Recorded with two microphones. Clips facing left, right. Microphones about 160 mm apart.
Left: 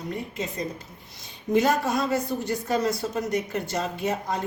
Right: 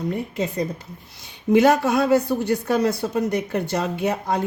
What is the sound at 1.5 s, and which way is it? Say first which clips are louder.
Speech: right 6 dB; 70° right (ahead or behind).